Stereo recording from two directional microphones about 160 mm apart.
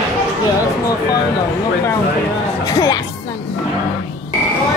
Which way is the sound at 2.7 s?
25° left (ahead or behind).